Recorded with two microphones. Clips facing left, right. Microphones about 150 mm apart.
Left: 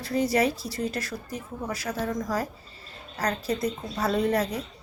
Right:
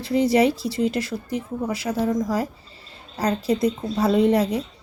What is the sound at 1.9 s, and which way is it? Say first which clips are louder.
Speech: right 8 dB; 15° right (ahead or behind).